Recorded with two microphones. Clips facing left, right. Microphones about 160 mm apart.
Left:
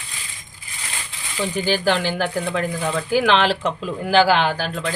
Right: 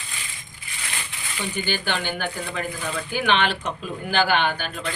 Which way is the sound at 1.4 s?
90° left.